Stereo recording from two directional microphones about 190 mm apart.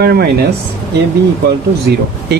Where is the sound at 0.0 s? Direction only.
55° right (ahead or behind).